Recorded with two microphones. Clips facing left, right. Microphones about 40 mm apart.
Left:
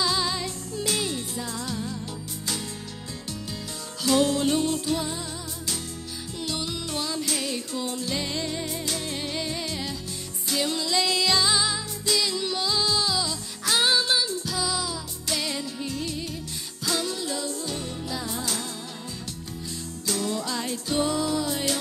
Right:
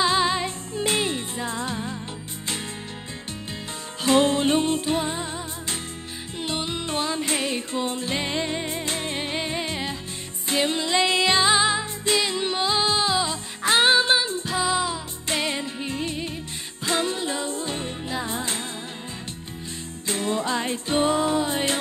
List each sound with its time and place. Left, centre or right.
0.0 s music: right
4.0 s music: right
20.1 s music: right